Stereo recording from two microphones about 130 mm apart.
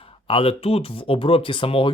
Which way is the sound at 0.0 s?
45° left (ahead or behind).